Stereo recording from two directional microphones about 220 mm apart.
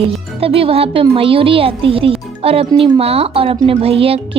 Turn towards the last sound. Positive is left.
turn(degrees=-25)  # may be behind; listen again after turning